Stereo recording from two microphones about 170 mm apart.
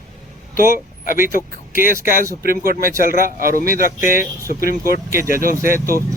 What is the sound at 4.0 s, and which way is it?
Speech, 55° left (ahead or behind).